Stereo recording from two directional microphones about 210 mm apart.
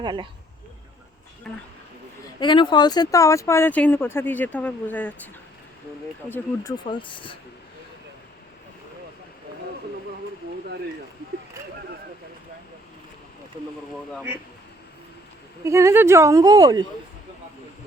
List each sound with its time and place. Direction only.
0.0 s speech: 20° right (ahead or behind)
2.4 s speech: 20° left (ahead or behind)
6.8 s speech: 25° left (ahead or behind)
15.6 s speech: 15° right (ahead or behind)